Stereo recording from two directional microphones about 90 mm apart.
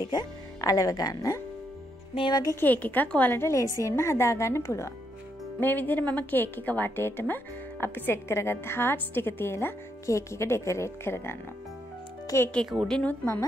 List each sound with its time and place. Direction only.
0.1 s a woman's voice: 45° left (ahead or behind)
2.5 s a woman's voice: 20° left (ahead or behind)
5.6 s a woman's voice: 20° left (ahead or behind)
12.8 s a woman's voice: 10° left (ahead or behind)
13.2 s a woman's voice: 30° left (ahead or behind)